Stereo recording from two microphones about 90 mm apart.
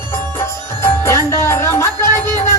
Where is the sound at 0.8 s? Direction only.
30° left (ahead or behind).